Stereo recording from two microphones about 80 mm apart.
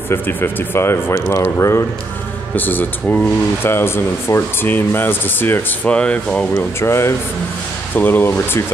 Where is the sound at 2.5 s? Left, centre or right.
Left.